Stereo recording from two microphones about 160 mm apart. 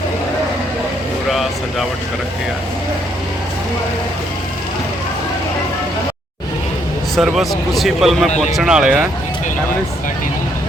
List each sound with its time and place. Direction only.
7.2 s speech: centre (ahead or behind)